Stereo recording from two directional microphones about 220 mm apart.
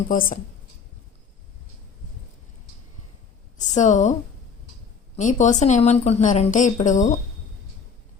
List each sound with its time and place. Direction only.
0.1 s a woman's voice: 40° left (ahead or behind)
3.8 s a woman's voice: 35° left (ahead or behind)
5.1 s a woman's voice: 35° left (ahead or behind)